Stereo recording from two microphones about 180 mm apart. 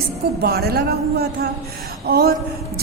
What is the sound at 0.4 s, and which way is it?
A woman's voice, 60° right (ahead or behind).